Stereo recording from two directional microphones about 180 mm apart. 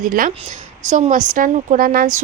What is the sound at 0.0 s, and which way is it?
A woman's voice, 50° right (ahead or behind).